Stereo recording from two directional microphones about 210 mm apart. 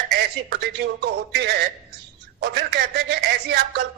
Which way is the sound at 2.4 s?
50° right (ahead or behind).